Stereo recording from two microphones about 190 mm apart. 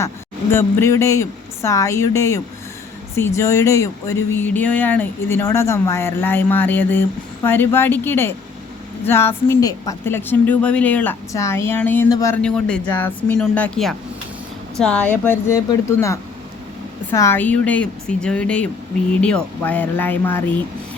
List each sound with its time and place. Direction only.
0.5 s speech: 15° left (ahead or behind)